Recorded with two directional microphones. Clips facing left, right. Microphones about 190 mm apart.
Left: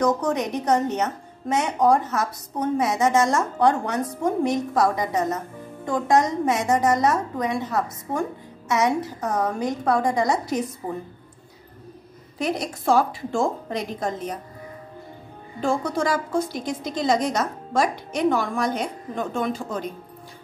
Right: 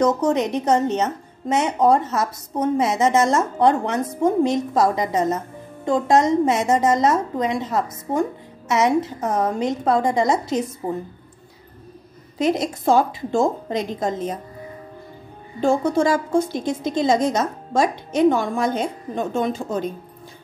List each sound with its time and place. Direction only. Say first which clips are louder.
0.0 s a woman's voice: right 4 dB; 25° right (ahead or behind)
12.4 s a woman's voice: right 6 dB; 25° right (ahead or behind)
15.6 s a woman's voice: right 5 dB; 25° right (ahead or behind)